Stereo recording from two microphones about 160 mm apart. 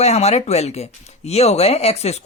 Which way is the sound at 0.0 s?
40° left (ahead or behind).